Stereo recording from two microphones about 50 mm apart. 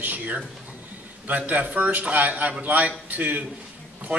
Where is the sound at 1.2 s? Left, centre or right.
Right.